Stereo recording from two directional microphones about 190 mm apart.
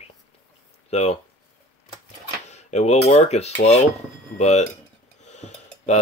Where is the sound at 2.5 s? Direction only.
35° left (ahead or behind).